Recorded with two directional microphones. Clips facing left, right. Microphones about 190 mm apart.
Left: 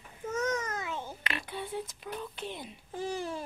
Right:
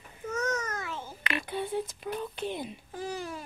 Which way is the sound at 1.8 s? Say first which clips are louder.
Right 5 dB; 5° right (ahead or behind).